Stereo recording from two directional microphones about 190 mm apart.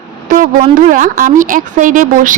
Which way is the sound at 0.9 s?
45° right (ahead or behind).